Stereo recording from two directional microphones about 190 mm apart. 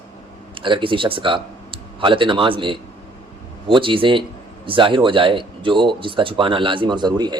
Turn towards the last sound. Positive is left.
turn(degrees=-20)  # may be behind; listen again after turning